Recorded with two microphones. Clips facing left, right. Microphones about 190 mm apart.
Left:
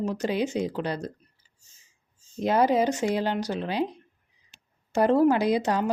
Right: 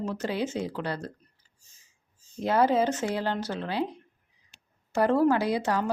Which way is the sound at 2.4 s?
15° left (ahead or behind).